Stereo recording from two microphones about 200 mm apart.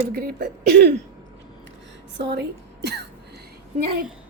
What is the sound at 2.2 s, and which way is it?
Speech, 60° right (ahead or behind).